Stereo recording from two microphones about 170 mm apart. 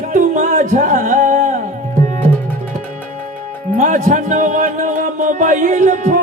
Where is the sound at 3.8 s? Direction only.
45° right (ahead or behind).